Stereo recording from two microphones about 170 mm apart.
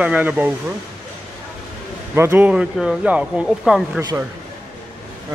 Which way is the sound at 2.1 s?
10° right (ahead or behind).